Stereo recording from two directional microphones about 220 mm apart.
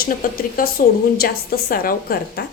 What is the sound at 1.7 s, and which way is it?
Speech, 40° left (ahead or behind).